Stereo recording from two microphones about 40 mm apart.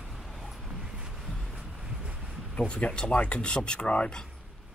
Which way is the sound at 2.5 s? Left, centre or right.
Left.